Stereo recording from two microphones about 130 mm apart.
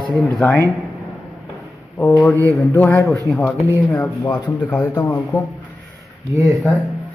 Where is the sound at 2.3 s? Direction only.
15° left (ahead or behind).